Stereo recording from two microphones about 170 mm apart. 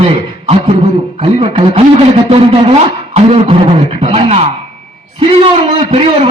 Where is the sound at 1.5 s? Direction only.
35° right (ahead or behind).